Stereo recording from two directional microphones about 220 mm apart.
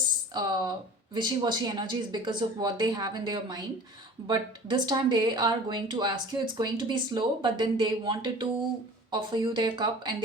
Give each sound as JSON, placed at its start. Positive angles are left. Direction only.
{"t": 0.3, "sound": "speech", "side_deg": -20}